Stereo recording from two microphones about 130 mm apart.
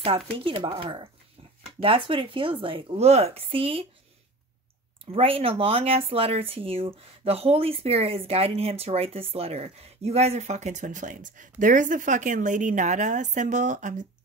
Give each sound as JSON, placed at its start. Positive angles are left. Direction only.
{"t": 0.0, "sound": "speech", "side_deg": -45}
{"t": 5.1, "sound": "speech", "side_deg": -45}